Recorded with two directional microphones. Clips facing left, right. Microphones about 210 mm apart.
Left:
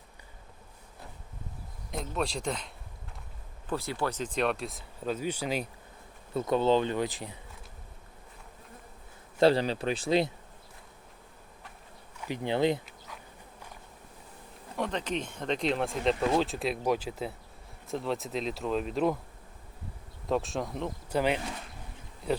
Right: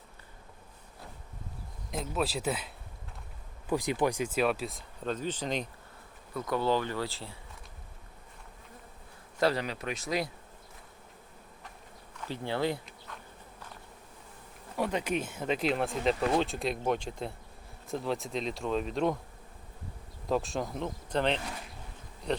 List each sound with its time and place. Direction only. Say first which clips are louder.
1.9 s speech: right 1 dB; centre (ahead or behind)
3.7 s speech: right 3 dB; 15° right (ahead or behind); by 5.6 s 10° left (ahead or behind)
6.3 s speech: left 4 dB; 25° left (ahead or behind)
9.4 s speech: left 6 dB; 30° left (ahead or behind)
12.2 s speech: left 4 dB; 15° left (ahead or behind)
14.8 s speech: right 1 dB; 10° right (ahead or behind)
20.2 s speech: left 1 dB; centre (ahead or behind)